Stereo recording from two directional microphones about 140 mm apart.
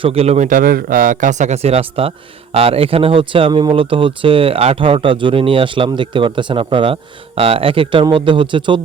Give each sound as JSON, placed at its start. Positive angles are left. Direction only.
{"t": 0.0, "sound": "speech", "side_deg": -45}